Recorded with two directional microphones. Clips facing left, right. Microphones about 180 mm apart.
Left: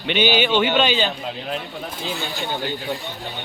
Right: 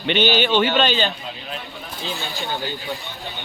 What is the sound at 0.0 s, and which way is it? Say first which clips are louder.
Speech: even; 10° left (ahead or behind).